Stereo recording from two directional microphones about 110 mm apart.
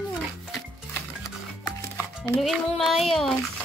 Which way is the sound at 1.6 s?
20° left (ahead or behind).